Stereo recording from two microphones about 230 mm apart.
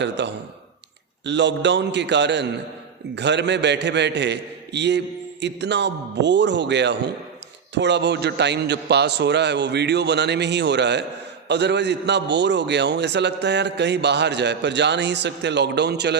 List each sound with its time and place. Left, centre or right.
0.0 s a man's voice: right